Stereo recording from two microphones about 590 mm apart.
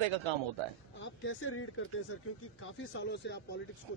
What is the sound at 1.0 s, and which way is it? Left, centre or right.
Speech, centre.